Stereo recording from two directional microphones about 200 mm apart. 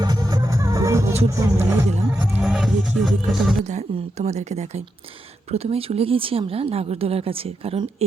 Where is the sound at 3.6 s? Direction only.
35° right (ahead or behind).